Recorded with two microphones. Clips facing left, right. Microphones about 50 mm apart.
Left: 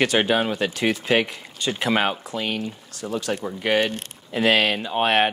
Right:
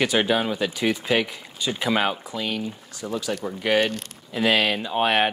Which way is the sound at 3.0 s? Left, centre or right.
Centre.